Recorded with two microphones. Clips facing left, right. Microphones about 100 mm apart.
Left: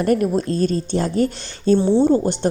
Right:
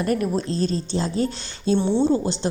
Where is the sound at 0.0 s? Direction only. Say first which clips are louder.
Left 5 dB; 45° left (ahead or behind).